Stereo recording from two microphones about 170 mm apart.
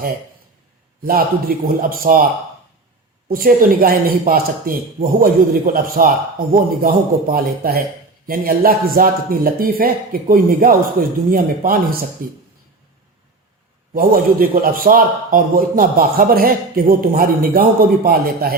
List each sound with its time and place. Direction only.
1.0 s a man's voice: 55° right (ahead or behind)
13.9 s a man's voice: 55° right (ahead or behind)